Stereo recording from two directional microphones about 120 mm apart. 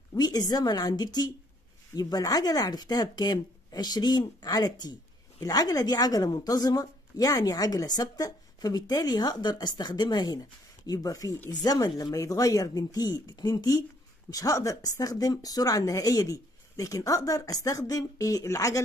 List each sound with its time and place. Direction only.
0.1 s a woman's voice: 35° left (ahead or behind)